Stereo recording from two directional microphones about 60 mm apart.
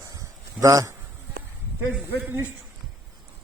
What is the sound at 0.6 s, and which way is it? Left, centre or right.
Speech, right.